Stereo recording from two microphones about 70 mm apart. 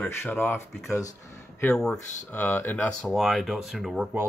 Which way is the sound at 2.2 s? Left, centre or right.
Left.